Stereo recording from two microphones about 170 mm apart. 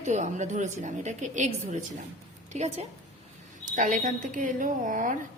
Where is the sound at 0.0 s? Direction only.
45° right (ahead or behind).